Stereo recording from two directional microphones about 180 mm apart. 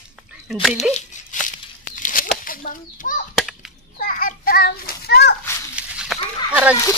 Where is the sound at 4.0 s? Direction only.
50° left (ahead or behind).